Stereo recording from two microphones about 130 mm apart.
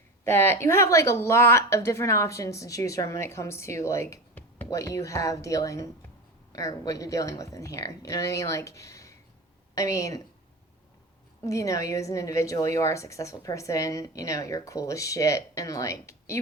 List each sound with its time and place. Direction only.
0.3 s a woman's voice: 20° left (ahead or behind)
4.4 s a sound: 15° left (ahead or behind)
4.7 s a woman's voice: 25° left (ahead or behind)
11.4 s a woman's voice: 25° left (ahead or behind)